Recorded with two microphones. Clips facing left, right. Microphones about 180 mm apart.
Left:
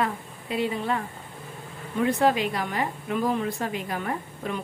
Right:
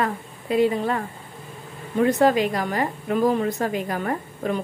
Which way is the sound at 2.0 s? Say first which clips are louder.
Right 4 dB; 45° right (ahead or behind).